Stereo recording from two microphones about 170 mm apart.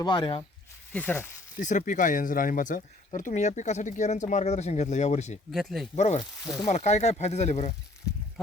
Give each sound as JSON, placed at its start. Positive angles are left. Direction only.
{"t": 0.0, "sound": "speech", "side_deg": 25}
{"t": 0.9, "sound": "speech", "side_deg": 10}
{"t": 1.5, "sound": "speech", "side_deg": 50}
{"t": 5.5, "sound": "speech", "side_deg": 0}
{"t": 6.7, "sound": "speech", "side_deg": 40}